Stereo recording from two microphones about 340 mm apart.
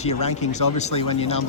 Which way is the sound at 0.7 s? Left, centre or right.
Centre.